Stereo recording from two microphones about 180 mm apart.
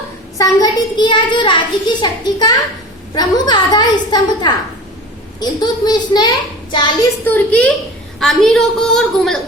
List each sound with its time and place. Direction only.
0.3 s a child's voice: 20° left (ahead or behind)
7.3 s a woman's voice: 10° left (ahead or behind)